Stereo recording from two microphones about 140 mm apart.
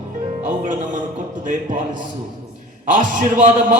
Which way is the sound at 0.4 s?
65° right (ahead or behind).